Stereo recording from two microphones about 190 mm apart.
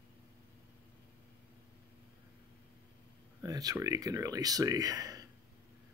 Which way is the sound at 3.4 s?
20° right (ahead or behind).